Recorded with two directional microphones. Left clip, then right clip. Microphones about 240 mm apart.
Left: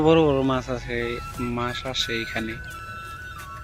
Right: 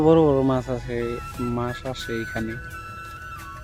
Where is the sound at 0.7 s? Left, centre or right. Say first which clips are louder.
Even; centre.